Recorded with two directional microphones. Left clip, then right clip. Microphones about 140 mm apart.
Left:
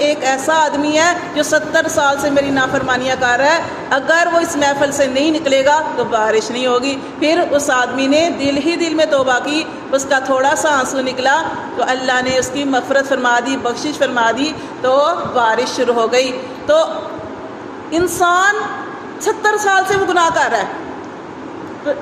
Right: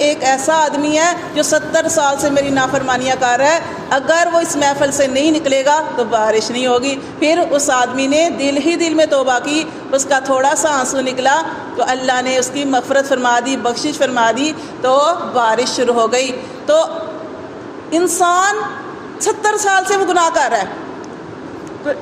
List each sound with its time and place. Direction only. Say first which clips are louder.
0.4 s a woman's voice: even; 35° right (ahead or behind)
17.9 s a woman's voice: right 1 dB; 40° right (ahead or behind)